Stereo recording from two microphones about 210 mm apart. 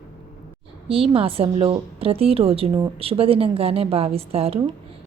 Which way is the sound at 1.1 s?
25° right (ahead or behind).